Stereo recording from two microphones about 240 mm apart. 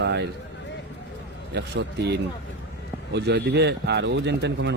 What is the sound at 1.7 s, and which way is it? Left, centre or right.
A man's voice, right.